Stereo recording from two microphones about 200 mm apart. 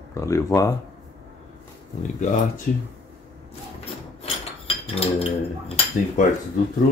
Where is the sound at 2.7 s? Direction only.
45° left (ahead or behind).